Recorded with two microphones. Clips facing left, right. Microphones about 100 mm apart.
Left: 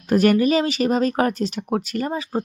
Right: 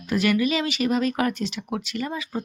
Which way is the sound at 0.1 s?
45° left (ahead or behind).